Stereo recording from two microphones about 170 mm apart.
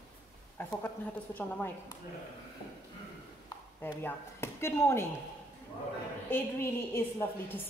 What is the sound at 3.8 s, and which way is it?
A man's voice, 15° left (ahead or behind).